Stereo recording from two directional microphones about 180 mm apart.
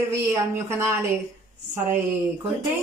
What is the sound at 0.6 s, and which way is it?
Speech, 15° right (ahead or behind).